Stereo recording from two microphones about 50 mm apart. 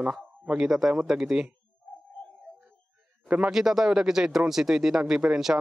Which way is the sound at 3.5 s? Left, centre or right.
Centre.